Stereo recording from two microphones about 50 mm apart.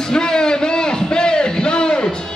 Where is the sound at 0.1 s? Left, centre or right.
Centre.